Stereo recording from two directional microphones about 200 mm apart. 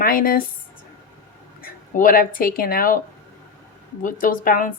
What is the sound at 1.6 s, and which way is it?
Speech, 45° left (ahead or behind).